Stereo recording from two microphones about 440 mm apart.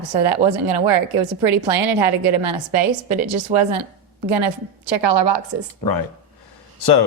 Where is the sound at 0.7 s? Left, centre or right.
Right.